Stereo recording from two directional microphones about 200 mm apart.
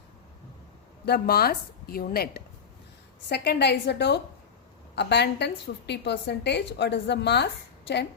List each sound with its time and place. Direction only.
1.0 s a woman's voice: 50° left (ahead or behind)